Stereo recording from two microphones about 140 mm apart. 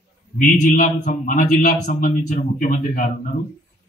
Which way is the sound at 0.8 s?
75° left (ahead or behind).